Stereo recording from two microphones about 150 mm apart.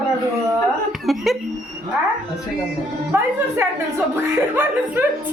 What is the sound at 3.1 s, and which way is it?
Speech, 15° right (ahead or behind).